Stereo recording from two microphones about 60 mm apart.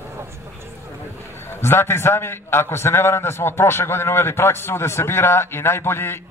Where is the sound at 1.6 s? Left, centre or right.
Left.